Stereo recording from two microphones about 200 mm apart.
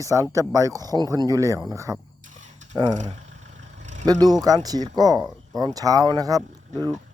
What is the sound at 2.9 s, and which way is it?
Vehicle, 35° right (ahead or behind).